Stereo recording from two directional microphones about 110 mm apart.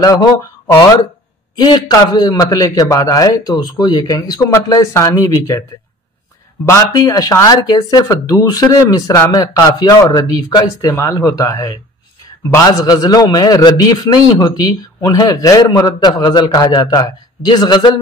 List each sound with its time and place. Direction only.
0.0 s speech: 30° left (ahead or behind)
6.9 s speech: 30° left (ahead or behind)